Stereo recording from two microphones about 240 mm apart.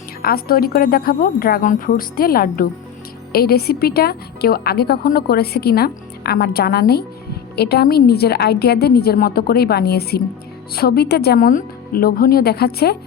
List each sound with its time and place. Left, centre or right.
0.2 s a woman's voice: left